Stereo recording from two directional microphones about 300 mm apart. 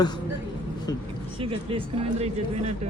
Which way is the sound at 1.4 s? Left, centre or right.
Centre.